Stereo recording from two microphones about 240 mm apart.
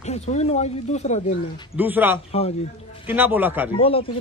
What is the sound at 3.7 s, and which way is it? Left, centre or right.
Speech, left.